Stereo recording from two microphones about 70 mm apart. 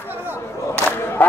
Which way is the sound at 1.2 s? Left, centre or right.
Left.